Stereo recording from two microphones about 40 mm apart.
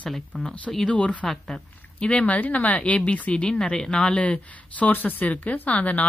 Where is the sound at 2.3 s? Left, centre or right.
Left; by 3.9 s centre.